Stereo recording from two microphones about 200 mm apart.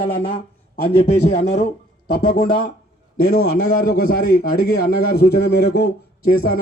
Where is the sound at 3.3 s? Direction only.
50° left (ahead or behind).